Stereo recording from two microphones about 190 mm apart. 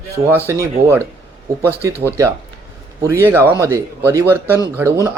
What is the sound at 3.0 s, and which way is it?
Speech, 15° right (ahead or behind).